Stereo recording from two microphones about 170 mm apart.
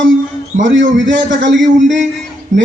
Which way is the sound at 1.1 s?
90° right.